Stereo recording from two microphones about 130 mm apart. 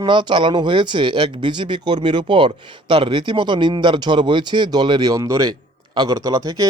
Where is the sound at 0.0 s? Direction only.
35° right (ahead or behind).